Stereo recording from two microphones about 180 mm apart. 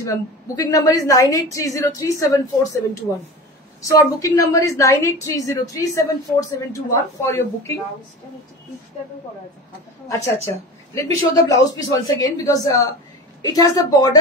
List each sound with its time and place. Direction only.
0.0 s a woman's voice: 20° left (ahead or behind)
10.0 s a woman's voice: 15° left (ahead or behind)